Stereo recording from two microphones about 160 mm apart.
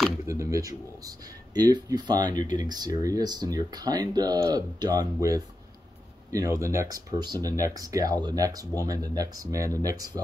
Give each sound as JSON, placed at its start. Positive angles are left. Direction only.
{"t": 0.3, "sound": "speech", "side_deg": -20}